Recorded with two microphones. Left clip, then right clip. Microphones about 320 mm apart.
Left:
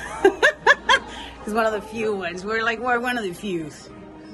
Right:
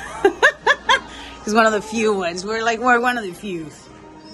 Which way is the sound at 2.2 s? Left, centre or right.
Centre.